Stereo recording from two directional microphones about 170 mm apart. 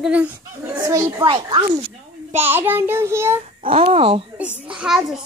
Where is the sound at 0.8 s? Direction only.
25° right (ahead or behind).